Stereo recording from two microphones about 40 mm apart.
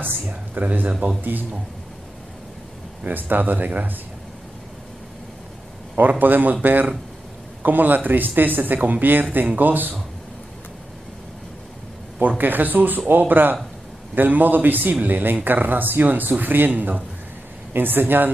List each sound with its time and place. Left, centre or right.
0.3 s a sound: right
1.2 s speech: right
3.1 s speech: right
5.9 s speech: right
12.2 s speech: right
17.7 s speech: right